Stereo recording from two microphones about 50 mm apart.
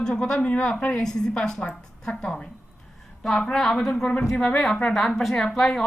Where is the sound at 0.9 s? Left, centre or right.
Centre.